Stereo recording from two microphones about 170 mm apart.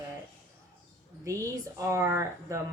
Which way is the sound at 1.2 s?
15° right (ahead or behind).